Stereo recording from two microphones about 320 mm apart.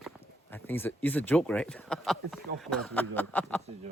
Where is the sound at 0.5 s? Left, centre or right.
Centre.